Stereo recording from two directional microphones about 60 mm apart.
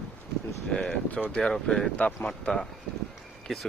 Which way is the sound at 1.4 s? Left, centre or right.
Centre.